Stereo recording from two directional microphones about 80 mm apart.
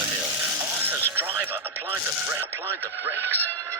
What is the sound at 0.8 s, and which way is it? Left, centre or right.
Music, right.